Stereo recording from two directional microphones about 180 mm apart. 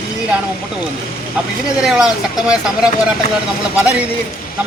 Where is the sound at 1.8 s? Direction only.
5° right (ahead or behind).